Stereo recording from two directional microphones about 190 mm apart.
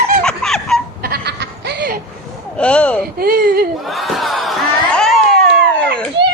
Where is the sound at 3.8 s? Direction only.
Centre (ahead or behind).